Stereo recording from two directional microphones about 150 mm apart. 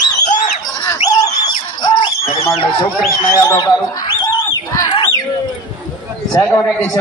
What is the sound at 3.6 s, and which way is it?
Speech, 30° left (ahead or behind).